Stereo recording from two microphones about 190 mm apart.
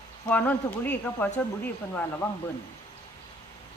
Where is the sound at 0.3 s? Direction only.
10° left (ahead or behind).